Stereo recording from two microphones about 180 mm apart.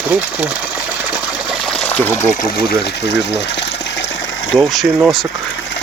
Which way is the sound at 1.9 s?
10° left (ahead or behind).